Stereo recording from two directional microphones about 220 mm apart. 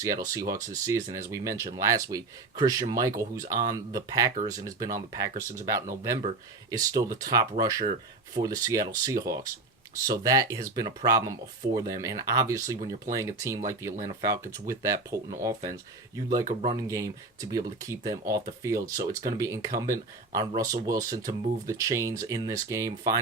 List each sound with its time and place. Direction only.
0.0 s speech: 15° right (ahead or behind)
13.9 s speech: 35° right (ahead or behind)
14.3 s speech: 15° right (ahead or behind)